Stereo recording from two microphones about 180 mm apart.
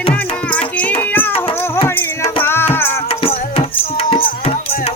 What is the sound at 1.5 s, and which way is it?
Music, 15° left (ahead or behind).